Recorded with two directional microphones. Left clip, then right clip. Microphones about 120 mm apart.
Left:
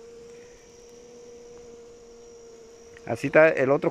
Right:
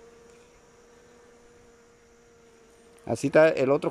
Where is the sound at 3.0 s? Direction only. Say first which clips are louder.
Left 1 dB; 20° right (ahead or behind).